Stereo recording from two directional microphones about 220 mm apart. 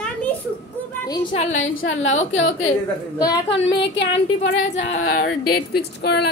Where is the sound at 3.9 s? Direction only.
55° left (ahead or behind).